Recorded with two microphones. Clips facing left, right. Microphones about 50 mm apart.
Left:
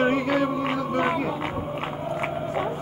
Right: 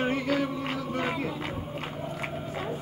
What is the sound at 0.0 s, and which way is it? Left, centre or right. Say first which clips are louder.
Music: left 5 dB; left.